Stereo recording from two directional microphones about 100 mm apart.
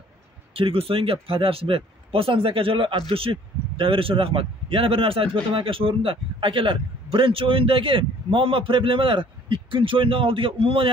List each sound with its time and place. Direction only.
0.6 s speech: 65° right (ahead or behind)